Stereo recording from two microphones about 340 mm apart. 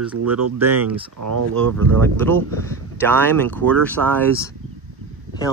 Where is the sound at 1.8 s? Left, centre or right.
Centre.